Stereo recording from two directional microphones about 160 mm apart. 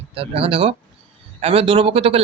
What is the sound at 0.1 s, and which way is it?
Speech, 35° right (ahead or behind).